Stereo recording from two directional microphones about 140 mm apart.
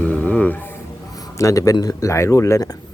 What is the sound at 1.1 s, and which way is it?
Speech, 25° left (ahead or behind).